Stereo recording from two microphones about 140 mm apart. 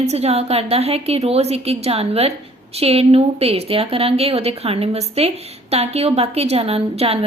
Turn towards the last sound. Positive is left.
turn(degrees=-45)  # may be behind; listen again after turning